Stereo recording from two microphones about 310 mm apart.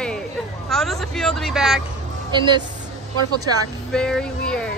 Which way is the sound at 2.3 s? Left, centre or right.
Centre.